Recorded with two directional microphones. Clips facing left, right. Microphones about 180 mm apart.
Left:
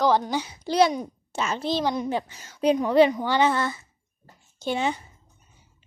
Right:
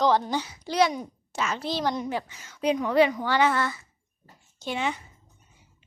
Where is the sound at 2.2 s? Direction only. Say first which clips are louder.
Left 5 dB; 30° left (ahead or behind).